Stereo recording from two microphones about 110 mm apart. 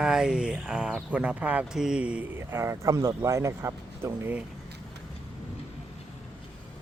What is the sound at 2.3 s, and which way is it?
Speech, 25° right (ahead or behind).